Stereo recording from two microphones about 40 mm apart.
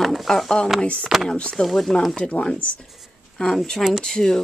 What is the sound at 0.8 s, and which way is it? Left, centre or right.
Speech, left.